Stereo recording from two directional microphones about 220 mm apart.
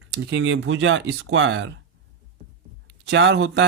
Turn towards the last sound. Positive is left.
turn(degrees=-55)  # may be behind; listen again after turning